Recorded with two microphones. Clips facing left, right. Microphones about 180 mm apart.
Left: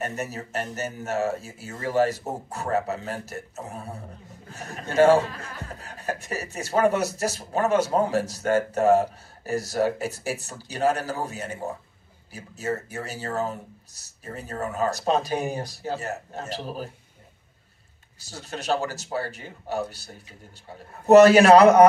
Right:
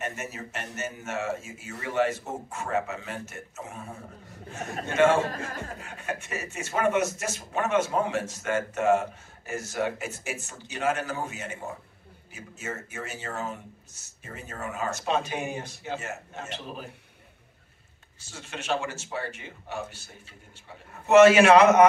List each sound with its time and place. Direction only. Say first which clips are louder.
0.0 s speech: left 4 dB; 35° left (ahead or behind)
18.2 s speech: left 5 dB; 35° left (ahead or behind)